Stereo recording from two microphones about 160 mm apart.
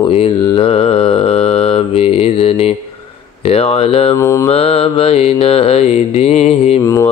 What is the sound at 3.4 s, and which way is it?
Mantra, 40° left (ahead or behind).